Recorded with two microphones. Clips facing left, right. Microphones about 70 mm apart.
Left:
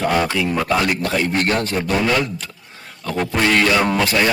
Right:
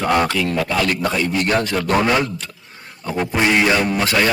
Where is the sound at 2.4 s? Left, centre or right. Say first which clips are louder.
Even; centre.